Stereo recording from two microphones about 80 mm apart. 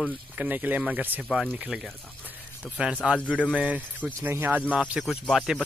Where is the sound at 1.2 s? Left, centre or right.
Centre.